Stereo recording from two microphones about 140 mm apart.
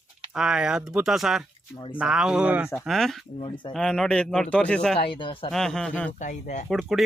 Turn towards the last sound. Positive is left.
turn(degrees=-5)  # may be behind; listen again after turning